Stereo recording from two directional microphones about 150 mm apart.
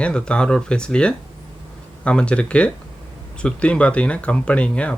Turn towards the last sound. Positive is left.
turn(degrees=5)  # may be behind; listen again after turning